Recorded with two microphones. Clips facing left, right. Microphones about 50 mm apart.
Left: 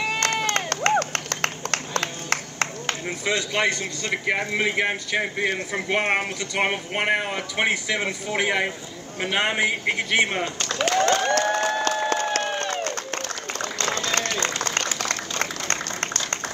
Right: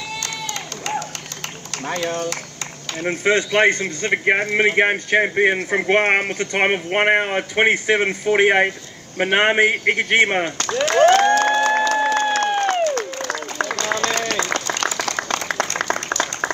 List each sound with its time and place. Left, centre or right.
0.2 s crowd: left
3.0 s speech: right
10.9 s crowd: right
11.9 s applause: right
12.4 s a sound: right
14.8 s applause: right